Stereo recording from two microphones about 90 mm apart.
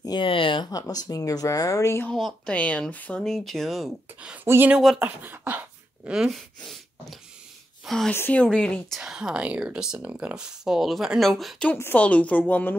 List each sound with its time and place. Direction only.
0.2 s speech: 75° left (ahead or behind)
0.7 s speech: 40° left (ahead or behind)
2.1 s speech: centre (ahead or behind)
2.5 s a woman's voice: 15° left (ahead or behind)
3.2 s speech: 5° left (ahead or behind)
4.5 s speech: 30° right (ahead or behind)
6.1 s speech: centre (ahead or behind)
8.1 s a woman's voice: 20° left (ahead or behind)
8.9 s speech: 5° right (ahead or behind)
11.8 s a woman's voice: 15° left (ahead or behind)